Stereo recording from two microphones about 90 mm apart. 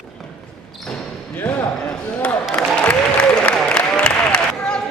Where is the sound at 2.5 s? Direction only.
15° left (ahead or behind).